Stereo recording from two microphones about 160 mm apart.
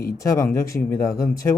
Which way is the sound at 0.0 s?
20° left (ahead or behind).